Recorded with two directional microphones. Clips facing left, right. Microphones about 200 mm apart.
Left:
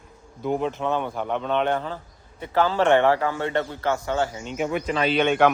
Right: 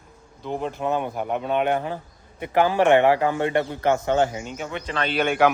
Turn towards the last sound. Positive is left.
turn(degrees=-5)  # may be behind; listen again after turning